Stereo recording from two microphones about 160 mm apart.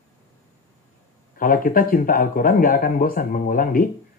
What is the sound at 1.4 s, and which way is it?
Speech, 60° left (ahead or behind).